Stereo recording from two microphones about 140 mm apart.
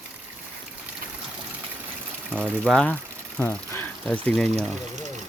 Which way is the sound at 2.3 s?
5° left (ahead or behind).